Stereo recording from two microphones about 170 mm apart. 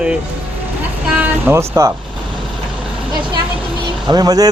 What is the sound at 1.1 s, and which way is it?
Music, 10° right (ahead or behind).